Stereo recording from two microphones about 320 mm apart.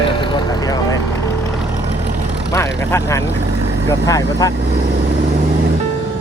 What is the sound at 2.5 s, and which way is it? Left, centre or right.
Speech, centre.